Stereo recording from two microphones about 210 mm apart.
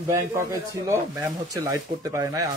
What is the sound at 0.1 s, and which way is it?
Speech, 15° right (ahead or behind).